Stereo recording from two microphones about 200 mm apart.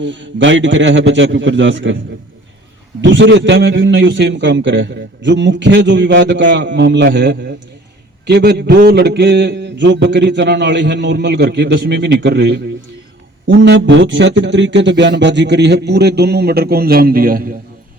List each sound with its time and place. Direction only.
0.0 s a man's voice: 65° right (ahead or behind)
3.0 s a man's voice: 65° right (ahead or behind); by 17.5 s 45° right (ahead or behind)